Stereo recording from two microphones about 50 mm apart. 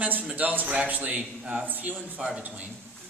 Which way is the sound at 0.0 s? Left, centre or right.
Right.